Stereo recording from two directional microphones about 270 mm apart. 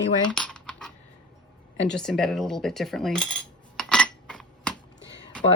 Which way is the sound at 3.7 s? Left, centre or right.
Centre.